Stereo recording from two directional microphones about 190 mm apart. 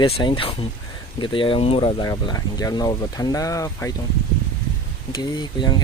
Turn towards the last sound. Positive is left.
turn(degrees=20)  # may be behind; listen again after turning